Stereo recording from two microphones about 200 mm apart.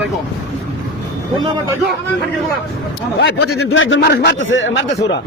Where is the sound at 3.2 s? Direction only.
60° left (ahead or behind).